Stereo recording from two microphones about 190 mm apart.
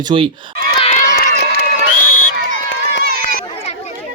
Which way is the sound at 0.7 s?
30° left (ahead or behind).